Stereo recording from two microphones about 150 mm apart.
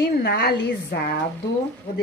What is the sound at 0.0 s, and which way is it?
A woman's voice, 90° left.